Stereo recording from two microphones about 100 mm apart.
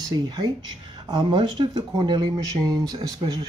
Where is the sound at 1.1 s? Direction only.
55° right (ahead or behind).